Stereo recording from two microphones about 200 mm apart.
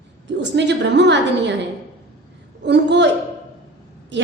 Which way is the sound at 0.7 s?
60° right (ahead or behind).